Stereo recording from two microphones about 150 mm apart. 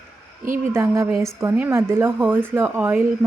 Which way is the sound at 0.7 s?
20° right (ahead or behind).